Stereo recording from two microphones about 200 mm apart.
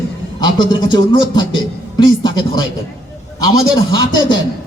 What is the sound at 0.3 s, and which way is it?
A man's voice, 20° left (ahead or behind).